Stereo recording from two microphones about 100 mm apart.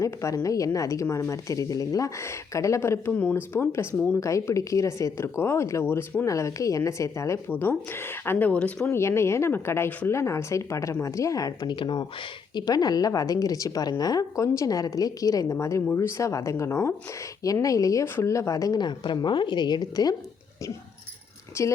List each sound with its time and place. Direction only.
0.0 s a woman's voice: 35° left (ahead or behind)
3.2 s speech: 20° left (ahead or behind)
8.9 s a woman's voice: 25° left (ahead or behind)
11.8 s speech: 50° left (ahead or behind)
12.5 s a woman's voice: 40° left (ahead or behind)
21.6 s speech: 25° left (ahead or behind)